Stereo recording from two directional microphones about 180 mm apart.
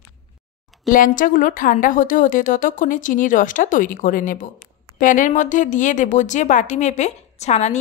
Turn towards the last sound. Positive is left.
turn(degrees=40)  # may be behind; listen again after turning